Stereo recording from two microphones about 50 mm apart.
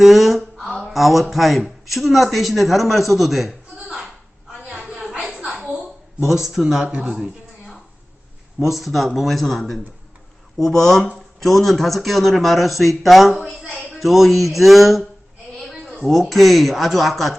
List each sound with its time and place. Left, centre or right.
0.0 s a sound: centre
0.8 s speech: centre
6.2 s speech: centre
8.5 s speech: centre
15.5 s a sound: centre
16.3 s speech: centre